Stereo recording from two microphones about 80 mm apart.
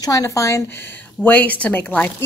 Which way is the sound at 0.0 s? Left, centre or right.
Left.